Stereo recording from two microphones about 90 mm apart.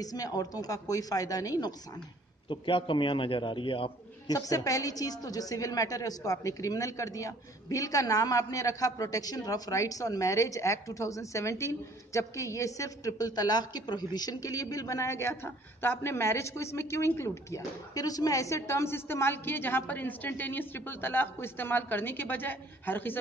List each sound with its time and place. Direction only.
0.0 s speech: 45° left (ahead or behind)
2.5 s a man's voice: 65° left (ahead or behind)
4.3 s a woman's voice: 40° left (ahead or behind); by 23.1 s 20° left (ahead or behind)